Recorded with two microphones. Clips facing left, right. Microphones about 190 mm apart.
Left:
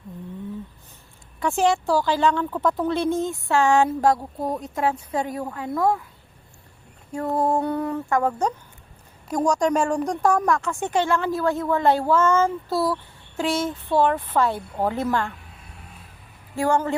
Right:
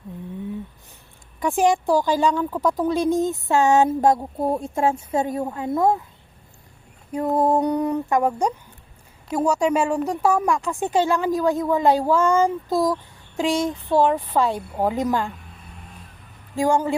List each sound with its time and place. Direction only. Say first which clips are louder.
1.4 s speech: right 2 dB; 15° right (ahead or behind)
7.3 s speech: right 3 dB; 20° right (ahead or behind)
16.6 s speech: right 2 dB; 10° right (ahead or behind)